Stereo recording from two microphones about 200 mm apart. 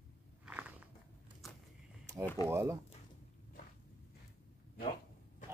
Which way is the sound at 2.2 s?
10° left (ahead or behind).